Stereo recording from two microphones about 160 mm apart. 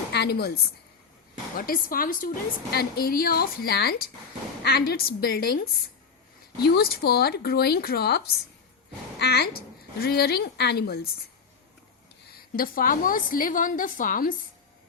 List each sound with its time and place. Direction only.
0.1 s a woman's voice: 90° left
1.5 s a woman's voice: 60° left (ahead or behind)
2.7 s a woman's voice: 75° left (ahead or behind)
12.5 s a woman's voice: 60° left (ahead or behind)